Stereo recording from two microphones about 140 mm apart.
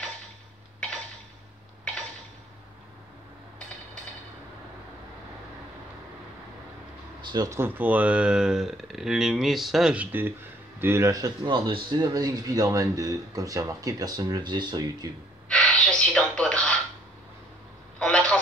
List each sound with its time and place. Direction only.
7.2 s a man's voice: 25° right (ahead or behind)
15.4 s gasp: 5° left (ahead or behind)
17.9 s vehicle: 5° left (ahead or behind)